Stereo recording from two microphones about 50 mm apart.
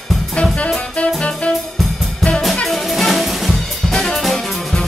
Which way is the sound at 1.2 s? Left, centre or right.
Centre.